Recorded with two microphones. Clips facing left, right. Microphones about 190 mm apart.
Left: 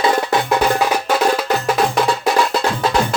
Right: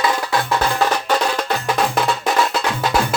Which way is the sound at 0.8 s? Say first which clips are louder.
Left 1 dB; 10° left (ahead or behind).